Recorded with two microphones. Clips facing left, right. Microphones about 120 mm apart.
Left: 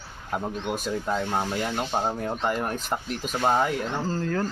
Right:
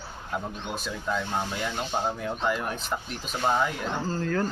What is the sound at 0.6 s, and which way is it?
Speech, 45° left (ahead or behind).